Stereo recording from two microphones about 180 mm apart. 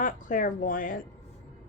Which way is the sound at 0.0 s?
45° left (ahead or behind).